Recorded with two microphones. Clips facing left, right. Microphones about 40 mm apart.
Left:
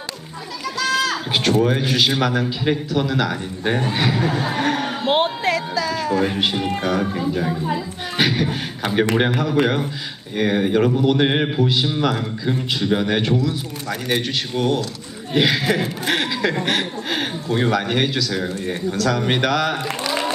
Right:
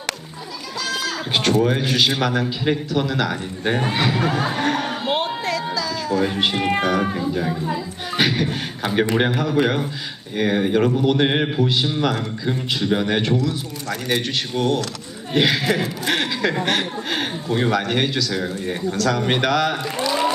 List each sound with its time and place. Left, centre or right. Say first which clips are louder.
0.8 s goat: left 5 dB; left
1.3 s a sound: right 3 dB; centre
1.6 s speech: even; centre
4.4 s a sound: even; centre
5.0 s music: left 7 dB; left
6.1 s speech: right 2 dB; centre